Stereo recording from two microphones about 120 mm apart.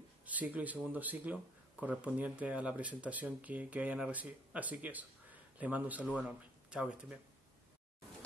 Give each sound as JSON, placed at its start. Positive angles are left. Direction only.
{"t": 0.2, "sound": "speech", "side_deg": -15}